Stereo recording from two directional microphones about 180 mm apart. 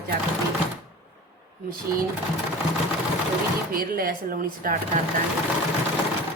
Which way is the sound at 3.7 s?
50° right (ahead or behind).